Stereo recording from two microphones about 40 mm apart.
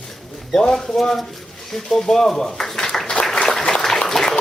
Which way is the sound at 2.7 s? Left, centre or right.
Centre.